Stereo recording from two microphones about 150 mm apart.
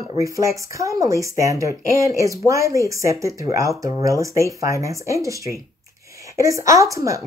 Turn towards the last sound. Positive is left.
turn(degrees=-20)  # may be behind; listen again after turning